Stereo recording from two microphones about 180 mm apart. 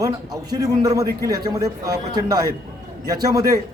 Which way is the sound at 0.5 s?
20° right (ahead or behind).